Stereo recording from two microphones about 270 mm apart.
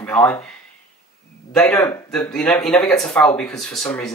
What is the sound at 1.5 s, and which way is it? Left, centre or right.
Speech, centre.